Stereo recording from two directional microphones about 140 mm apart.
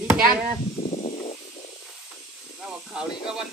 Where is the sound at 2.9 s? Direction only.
5° right (ahead or behind).